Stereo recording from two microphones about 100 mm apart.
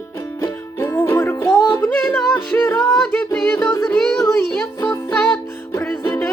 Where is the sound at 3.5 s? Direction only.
30° left (ahead or behind).